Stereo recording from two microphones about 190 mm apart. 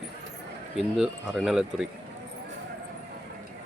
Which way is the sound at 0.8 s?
Centre (ahead or behind).